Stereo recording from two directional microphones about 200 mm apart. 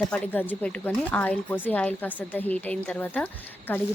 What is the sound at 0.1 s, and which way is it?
A woman's voice, 5° left (ahead or behind).